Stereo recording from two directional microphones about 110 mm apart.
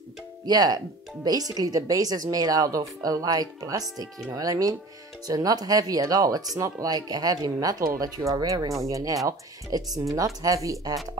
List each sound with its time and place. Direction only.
0.5 s speech: 35° right (ahead or behind)